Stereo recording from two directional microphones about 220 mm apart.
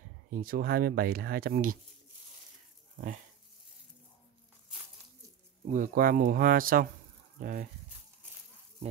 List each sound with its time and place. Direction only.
0.3 s speech: 40° right (ahead or behind)
3.0 s speech: 35° right (ahead or behind)
5.7 s speech: 40° right (ahead or behind)